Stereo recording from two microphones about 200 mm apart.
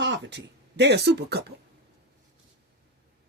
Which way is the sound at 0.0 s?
60° right (ahead or behind).